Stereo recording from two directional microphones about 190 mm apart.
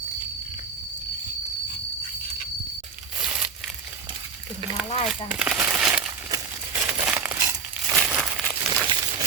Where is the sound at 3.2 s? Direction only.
5° right (ahead or behind).